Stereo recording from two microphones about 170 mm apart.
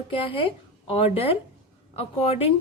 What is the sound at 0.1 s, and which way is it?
Speech, 30° left (ahead or behind).